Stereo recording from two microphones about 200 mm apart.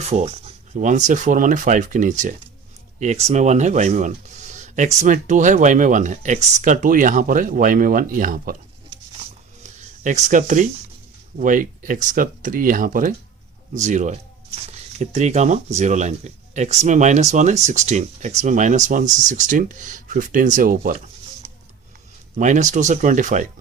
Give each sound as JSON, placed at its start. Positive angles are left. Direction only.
{"t": 0.0, "sound": "speech", "side_deg": -35}
{"t": 10.0, "sound": "speech", "side_deg": -35}
{"t": 22.4, "sound": "speech", "side_deg": -40}